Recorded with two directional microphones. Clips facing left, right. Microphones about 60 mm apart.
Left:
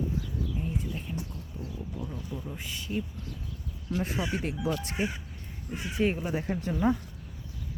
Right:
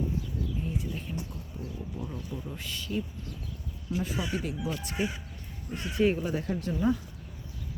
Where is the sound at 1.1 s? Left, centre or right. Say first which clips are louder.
Left 1 dB; centre.